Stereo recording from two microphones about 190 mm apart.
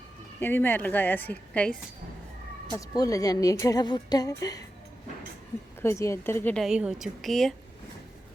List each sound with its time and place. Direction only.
0.3 s a woman's voice: 10° left (ahead or behind)
2.7 s a woman's voice: 20° left (ahead or behind)
5.8 s a woman's voice: 15° left (ahead or behind)